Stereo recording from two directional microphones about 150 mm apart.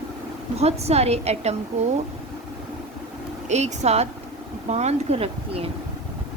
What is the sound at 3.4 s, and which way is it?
A woman's voice, 50° right (ahead or behind).